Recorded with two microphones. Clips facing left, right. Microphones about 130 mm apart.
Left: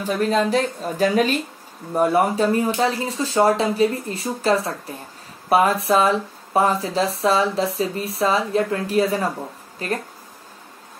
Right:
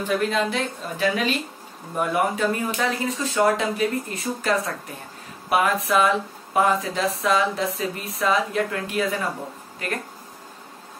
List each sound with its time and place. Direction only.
0.0 s speech: 35° left (ahead or behind)